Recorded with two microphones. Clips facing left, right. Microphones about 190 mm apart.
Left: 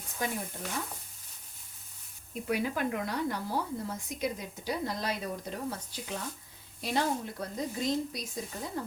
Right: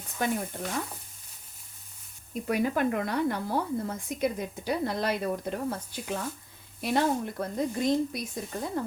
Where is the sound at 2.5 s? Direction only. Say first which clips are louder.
Right 4 dB; 50° right (ahead or behind).